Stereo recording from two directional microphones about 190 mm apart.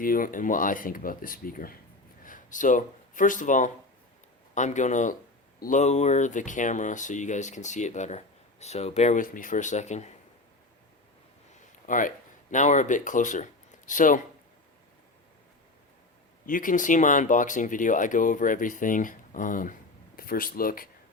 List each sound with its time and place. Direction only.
0.0 s speech: 45° left (ahead or behind)
11.9 s speech: 45° left (ahead or behind)
16.5 s speech: 45° left (ahead or behind)